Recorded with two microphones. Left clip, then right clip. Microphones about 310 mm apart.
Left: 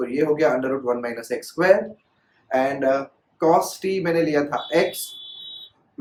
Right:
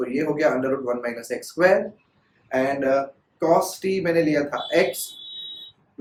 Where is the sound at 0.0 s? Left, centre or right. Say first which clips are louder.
Left 2 dB; centre.